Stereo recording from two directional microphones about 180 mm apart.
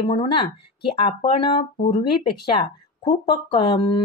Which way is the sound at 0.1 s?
25° left (ahead or behind).